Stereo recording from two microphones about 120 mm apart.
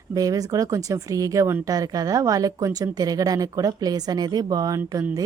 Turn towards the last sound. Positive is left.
turn(degrees=-20)  # may be behind; listen again after turning